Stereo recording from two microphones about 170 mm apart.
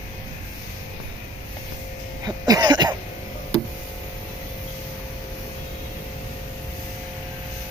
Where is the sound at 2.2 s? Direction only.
25° right (ahead or behind).